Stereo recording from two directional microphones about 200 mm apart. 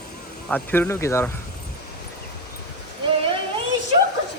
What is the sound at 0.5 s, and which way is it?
Speech, 10° left (ahead or behind).